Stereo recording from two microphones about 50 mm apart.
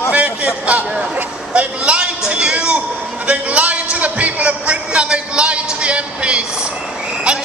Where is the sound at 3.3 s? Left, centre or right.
Right.